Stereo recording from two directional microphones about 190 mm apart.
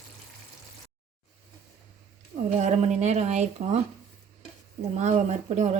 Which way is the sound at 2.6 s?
40° right (ahead or behind).